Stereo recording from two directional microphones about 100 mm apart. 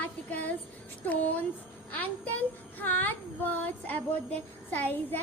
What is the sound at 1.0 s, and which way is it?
Child singing, 15° left (ahead or behind).